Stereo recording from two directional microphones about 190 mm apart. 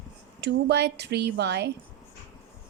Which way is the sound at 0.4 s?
60° right (ahead or behind).